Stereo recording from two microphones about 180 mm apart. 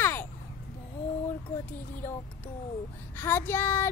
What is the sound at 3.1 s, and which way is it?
Speech, 10° left (ahead or behind).